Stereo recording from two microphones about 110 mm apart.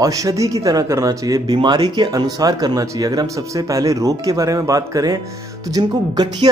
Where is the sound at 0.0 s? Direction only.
30° right (ahead or behind).